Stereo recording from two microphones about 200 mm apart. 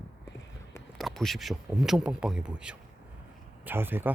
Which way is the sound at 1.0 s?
Centre (ahead or behind).